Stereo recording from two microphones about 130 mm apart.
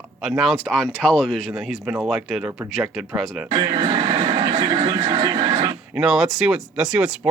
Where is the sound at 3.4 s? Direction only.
35° right (ahead or behind).